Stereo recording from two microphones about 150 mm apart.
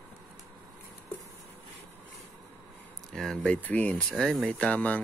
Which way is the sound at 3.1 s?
Centre (ahead or behind).